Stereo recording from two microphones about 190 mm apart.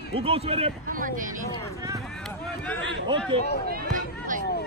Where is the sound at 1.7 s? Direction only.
15° right (ahead or behind).